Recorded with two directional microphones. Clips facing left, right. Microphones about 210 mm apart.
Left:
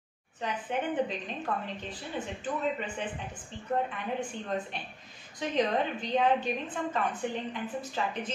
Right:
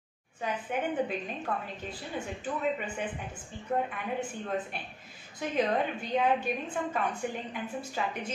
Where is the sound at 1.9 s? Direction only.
10° right (ahead or behind).